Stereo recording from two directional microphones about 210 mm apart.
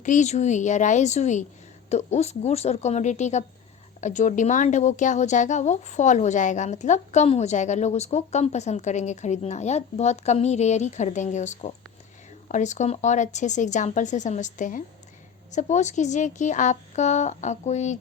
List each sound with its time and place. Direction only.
0.0 s speech: 35° left (ahead or behind)